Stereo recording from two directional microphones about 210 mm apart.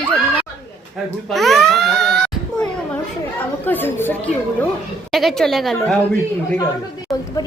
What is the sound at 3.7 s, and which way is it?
Chatter, 10° left (ahead or behind).